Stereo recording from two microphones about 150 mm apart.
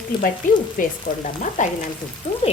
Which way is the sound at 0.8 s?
65° left (ahead or behind).